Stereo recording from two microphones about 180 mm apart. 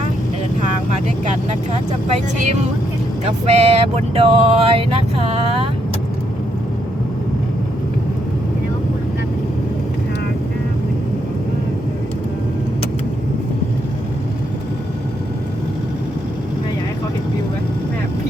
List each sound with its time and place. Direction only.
1.2 s speech: 40° right (ahead or behind)
3.2 s vehicle: 35° right (ahead or behind)